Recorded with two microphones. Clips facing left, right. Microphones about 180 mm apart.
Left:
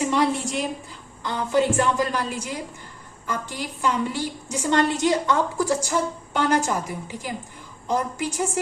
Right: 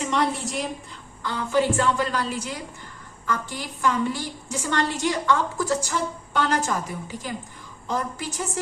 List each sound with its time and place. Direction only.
0.0 s a woman's voice: 5° left (ahead or behind)
1.2 s a woman's voice: 20° left (ahead or behind)